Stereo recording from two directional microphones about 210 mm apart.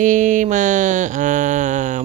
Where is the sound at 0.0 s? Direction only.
35° right (ahead or behind).